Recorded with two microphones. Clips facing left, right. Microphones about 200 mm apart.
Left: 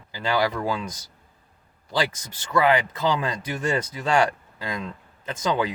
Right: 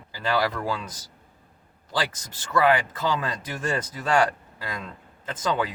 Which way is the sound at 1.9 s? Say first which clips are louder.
Left 3 dB; 15° left (ahead or behind).